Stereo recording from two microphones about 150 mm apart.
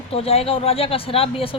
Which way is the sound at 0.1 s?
40° left (ahead or behind).